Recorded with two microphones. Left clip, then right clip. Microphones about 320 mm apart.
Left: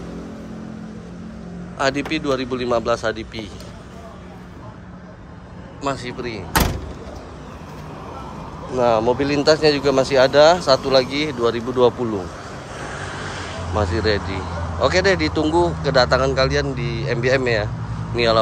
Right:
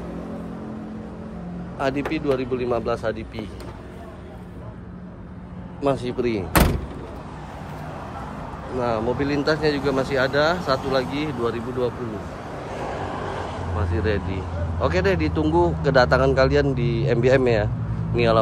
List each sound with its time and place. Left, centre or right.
1.8 s speech: centre
5.8 s a man's voice: centre
8.7 s speech: centre
12.7 s vehicle: right
13.7 s speech: centre